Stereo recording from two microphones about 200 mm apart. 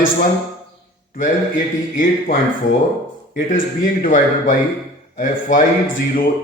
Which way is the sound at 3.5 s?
40° left (ahead or behind).